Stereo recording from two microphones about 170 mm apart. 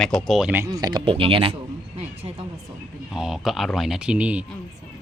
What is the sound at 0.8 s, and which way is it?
Speech, 30° right (ahead or behind).